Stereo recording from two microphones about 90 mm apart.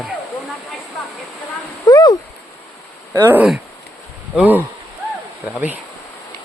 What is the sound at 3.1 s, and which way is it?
Speech, 20° right (ahead or behind).